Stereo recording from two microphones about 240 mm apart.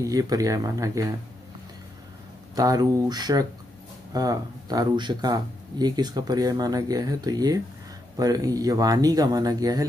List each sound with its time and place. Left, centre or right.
0.0 s speech: centre
2.5 s speech: centre